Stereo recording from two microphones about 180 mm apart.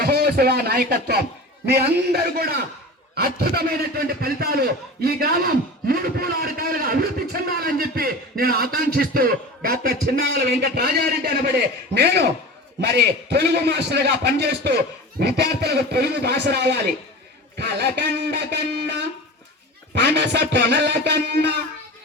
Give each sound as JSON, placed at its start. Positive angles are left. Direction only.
{"t": 0.0, "sound": "speech", "side_deg": -60}